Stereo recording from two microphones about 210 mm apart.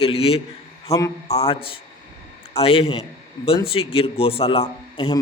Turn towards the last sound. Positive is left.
turn(degrees=25)  # may be behind; listen again after turning